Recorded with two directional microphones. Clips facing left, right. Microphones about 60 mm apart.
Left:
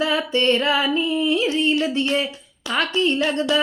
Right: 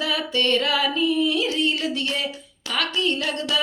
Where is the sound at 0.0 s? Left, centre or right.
Left.